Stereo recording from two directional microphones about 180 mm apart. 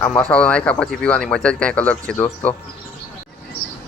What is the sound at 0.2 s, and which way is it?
Speech, 5° left (ahead or behind).